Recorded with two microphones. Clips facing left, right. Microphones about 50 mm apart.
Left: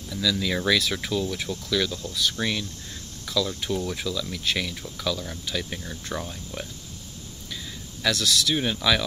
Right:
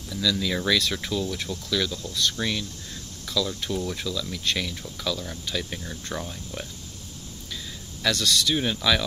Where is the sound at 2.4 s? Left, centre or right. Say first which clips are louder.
Left 2 dB; left.